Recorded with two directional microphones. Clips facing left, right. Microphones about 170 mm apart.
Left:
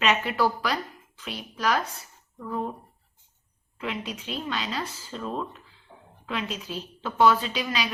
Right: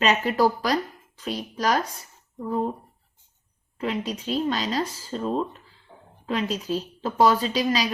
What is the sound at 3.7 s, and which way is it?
Speech, 40° right (ahead or behind).